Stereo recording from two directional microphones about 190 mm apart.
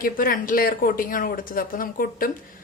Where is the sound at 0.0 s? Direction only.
50° left (ahead or behind).